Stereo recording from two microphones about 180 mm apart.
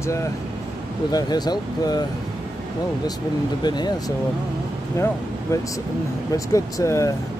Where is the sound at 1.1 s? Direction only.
20° left (ahead or behind).